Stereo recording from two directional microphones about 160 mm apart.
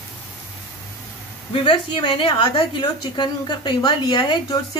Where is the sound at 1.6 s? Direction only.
30° left (ahead or behind).